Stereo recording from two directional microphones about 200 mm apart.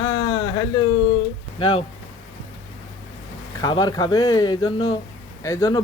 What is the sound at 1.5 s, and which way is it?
Speech, 25° left (ahead or behind).